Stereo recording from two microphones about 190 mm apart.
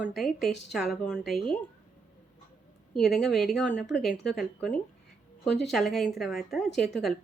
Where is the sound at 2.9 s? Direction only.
Centre (ahead or behind).